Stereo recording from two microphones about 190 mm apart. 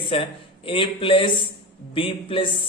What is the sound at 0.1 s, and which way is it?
A man's voice, 30° left (ahead or behind).